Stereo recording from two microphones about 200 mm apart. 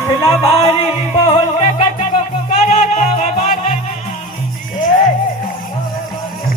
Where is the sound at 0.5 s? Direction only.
30° left (ahead or behind).